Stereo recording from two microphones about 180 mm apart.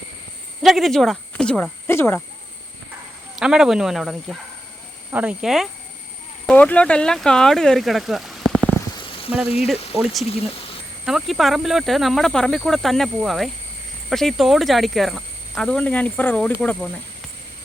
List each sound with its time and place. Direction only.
0.6 s speech: centre (ahead or behind)
3.3 s speech: 5° right (ahead or behind)
9.0 s a sound: 30° left (ahead or behind)
10.0 s speech: centre (ahead or behind)